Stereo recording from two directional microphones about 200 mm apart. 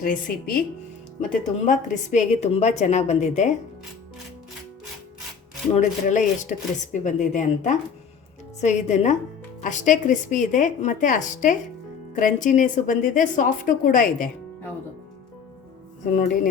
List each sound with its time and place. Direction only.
0.0 s a woman's voice: 45° left (ahead or behind)
5.7 s a woman's voice: 35° left (ahead or behind)
16.1 s speech: 45° left (ahead or behind)